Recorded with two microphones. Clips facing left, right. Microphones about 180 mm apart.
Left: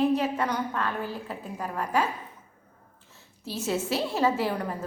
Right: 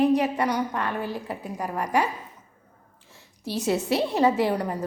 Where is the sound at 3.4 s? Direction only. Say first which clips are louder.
Right 4 dB; 70° right (ahead or behind).